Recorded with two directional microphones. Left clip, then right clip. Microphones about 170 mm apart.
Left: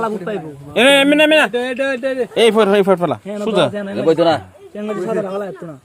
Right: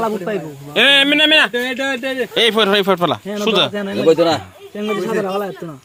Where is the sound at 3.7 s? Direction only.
20° right (ahead or behind).